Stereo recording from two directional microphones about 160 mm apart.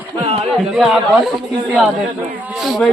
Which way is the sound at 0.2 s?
35° right (ahead or behind).